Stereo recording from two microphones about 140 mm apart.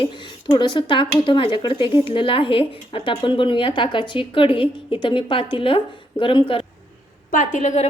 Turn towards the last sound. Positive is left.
turn(degrees=60)  # may be behind; listen again after turning